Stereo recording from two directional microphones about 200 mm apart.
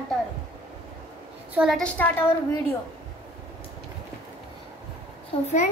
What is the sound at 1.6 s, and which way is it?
Speech, centre (ahead or behind).